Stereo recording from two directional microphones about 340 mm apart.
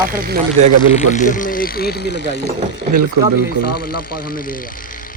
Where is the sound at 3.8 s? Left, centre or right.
Left.